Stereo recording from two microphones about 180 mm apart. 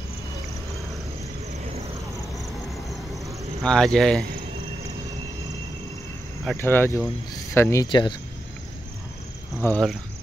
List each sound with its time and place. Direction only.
3.6 s speech: 5° left (ahead or behind)
6.5 s speech: 10° left (ahead or behind)
9.6 s speech: 10° left (ahead or behind)